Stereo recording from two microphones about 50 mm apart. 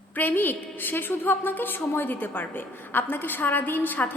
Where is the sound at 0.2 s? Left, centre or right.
Left.